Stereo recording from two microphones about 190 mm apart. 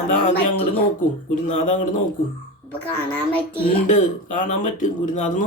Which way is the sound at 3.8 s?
40° left (ahead or behind).